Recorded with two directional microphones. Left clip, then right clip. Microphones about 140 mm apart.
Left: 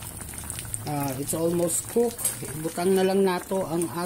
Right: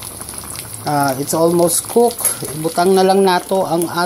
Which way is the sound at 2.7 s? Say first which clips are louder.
Right 11 dB; 5° right (ahead or behind).